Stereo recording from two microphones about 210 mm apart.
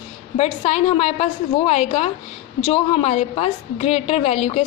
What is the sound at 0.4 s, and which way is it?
A woman's voice, 30° left (ahead or behind).